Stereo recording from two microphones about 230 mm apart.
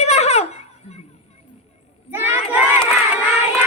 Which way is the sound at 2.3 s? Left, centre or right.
Centre.